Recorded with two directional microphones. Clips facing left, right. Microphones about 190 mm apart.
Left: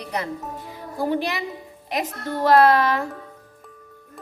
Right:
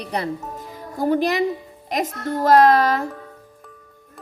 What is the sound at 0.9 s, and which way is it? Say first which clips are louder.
A woman's voice: right 5 dB; 45° right (ahead or behind).